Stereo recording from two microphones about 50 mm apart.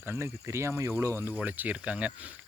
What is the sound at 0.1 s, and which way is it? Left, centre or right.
Speech, right.